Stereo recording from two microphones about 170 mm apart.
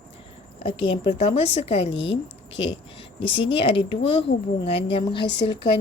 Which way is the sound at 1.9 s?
90° left.